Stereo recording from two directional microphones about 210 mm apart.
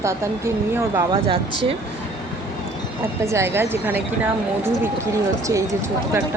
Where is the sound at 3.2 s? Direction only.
10° right (ahead or behind).